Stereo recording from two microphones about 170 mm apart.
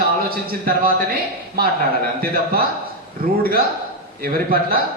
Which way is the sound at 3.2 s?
60° right (ahead or behind).